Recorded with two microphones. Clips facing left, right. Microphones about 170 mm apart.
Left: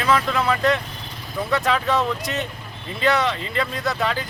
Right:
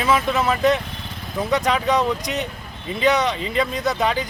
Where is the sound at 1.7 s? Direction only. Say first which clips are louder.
Right 1 dB; 15° right (ahead or behind).